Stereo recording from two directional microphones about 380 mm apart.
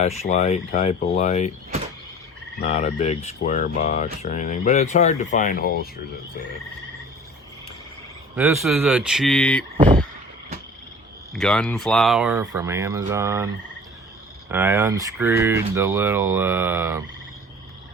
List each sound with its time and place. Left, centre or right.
0.0 s speech: centre
2.6 s speech: centre
8.4 s speech: centre
9.7 s vehicle: centre
11.3 s speech: centre
14.5 s speech: centre